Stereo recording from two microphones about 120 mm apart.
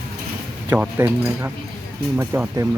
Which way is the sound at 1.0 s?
20° right (ahead or behind).